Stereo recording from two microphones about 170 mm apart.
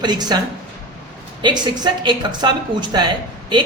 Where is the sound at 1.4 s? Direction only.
25° right (ahead or behind).